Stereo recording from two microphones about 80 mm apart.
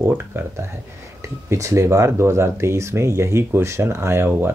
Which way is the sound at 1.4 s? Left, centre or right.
Right.